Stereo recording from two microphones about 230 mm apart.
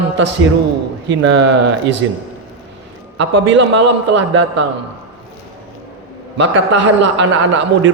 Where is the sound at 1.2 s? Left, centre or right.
Right.